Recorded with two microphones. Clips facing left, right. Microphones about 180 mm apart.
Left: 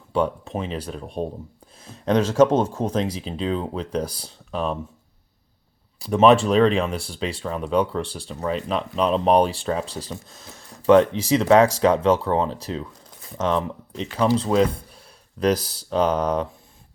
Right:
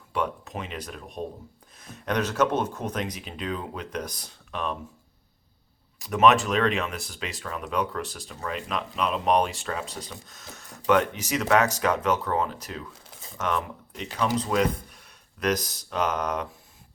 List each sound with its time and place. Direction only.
0.1 s speech: 30° left (ahead or behind)
6.0 s speech: 30° left (ahead or behind)